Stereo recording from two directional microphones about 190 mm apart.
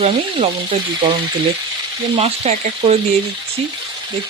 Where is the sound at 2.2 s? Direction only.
35° right (ahead or behind).